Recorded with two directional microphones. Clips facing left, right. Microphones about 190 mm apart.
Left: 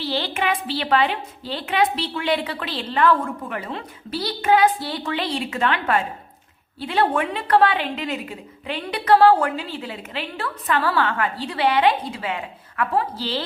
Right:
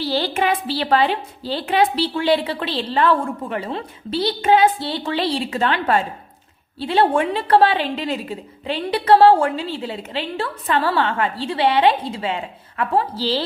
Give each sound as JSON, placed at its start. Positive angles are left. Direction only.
{"t": 0.0, "sound": "a woman's voice", "side_deg": -40}